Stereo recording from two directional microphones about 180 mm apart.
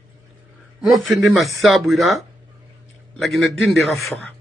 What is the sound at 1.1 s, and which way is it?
Speech, centre (ahead or behind).